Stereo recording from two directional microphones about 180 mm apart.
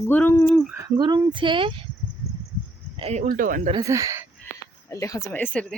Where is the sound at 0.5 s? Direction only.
Centre (ahead or behind).